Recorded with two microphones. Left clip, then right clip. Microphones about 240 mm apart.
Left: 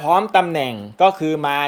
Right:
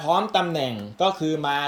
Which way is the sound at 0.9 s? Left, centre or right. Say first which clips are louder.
Left 8 dB; centre.